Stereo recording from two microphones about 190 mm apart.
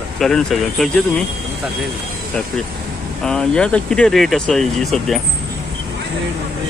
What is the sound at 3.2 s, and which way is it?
Speech, 5° left (ahead or behind).